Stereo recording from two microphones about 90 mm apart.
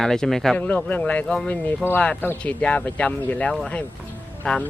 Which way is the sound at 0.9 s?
15° left (ahead or behind).